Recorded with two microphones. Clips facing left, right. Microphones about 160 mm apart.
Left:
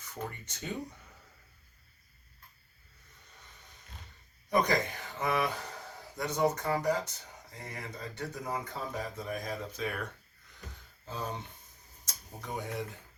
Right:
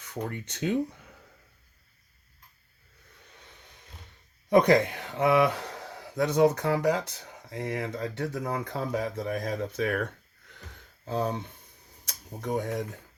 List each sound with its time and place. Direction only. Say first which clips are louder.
0.0 s speech: right 6 dB; 70° right (ahead or behind)
4.4 s speech: right 8 dB; 70° right (ahead or behind); by 12.8 s 50° right (ahead or behind)